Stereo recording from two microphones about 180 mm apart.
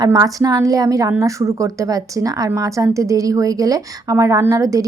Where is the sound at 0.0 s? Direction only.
20° right (ahead or behind).